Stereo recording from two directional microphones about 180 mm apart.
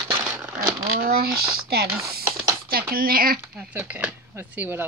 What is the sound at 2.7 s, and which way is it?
Speech, 55° right (ahead or behind).